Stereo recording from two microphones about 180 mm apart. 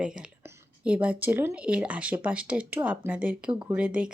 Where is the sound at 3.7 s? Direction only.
5° right (ahead or behind).